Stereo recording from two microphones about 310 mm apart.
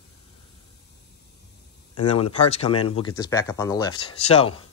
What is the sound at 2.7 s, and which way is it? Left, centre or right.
Speech, left.